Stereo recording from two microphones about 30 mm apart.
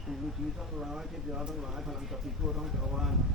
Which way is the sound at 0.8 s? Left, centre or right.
Right.